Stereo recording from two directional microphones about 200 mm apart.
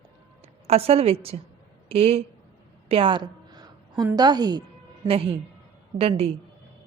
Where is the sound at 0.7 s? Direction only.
30° right (ahead or behind).